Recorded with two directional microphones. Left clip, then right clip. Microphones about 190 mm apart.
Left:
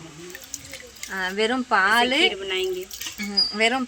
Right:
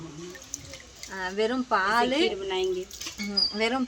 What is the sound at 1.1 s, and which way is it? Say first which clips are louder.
Speech: left 4 dB; 10° left (ahead or behind).